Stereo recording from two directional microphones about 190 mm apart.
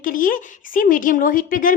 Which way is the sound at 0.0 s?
45° left (ahead or behind).